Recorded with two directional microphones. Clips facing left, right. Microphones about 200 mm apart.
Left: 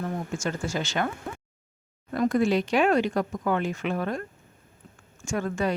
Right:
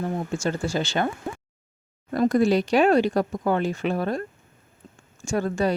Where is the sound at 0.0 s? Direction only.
35° right (ahead or behind).